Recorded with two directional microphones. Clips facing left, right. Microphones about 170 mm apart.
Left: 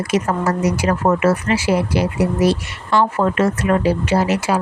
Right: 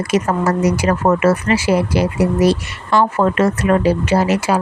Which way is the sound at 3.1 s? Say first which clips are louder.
Right 2 dB; 75° right (ahead or behind).